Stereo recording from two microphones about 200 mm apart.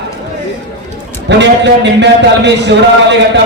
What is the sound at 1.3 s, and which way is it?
A man's voice, 60° right (ahead or behind).